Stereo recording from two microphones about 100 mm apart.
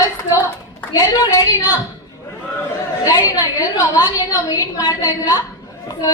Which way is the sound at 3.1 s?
35° left (ahead or behind).